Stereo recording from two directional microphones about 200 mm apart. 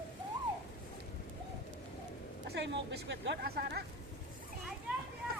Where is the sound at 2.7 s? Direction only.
60° right (ahead or behind).